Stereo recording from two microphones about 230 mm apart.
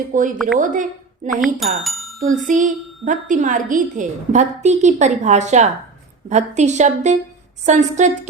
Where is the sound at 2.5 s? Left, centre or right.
Right.